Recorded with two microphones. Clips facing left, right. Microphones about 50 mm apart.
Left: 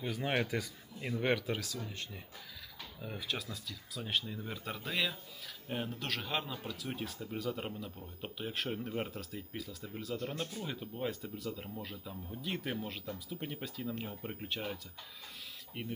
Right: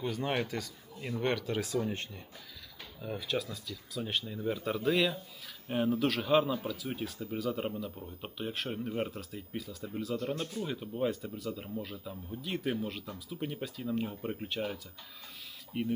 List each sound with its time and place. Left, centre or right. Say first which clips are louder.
0.0 s speech: right 2 dB; centre
1.5 s speech: right 9 dB; right
3.0 s speech: right 6 dB; centre